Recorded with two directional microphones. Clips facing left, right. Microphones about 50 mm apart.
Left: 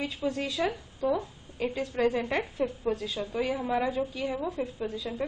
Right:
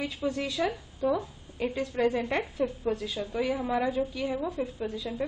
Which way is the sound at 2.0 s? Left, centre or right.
Centre.